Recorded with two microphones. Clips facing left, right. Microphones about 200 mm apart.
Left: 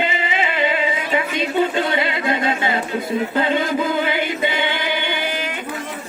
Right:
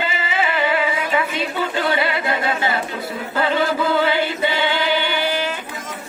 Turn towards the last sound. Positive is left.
turn(degrees=15)  # may be behind; listen again after turning